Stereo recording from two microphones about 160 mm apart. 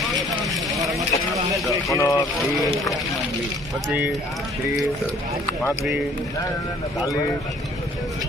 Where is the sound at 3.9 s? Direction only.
10° right (ahead or behind).